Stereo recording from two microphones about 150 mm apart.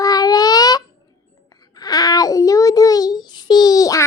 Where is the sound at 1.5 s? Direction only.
25° left (ahead or behind).